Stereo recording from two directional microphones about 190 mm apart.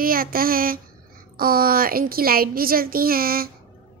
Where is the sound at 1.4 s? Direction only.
50° right (ahead or behind).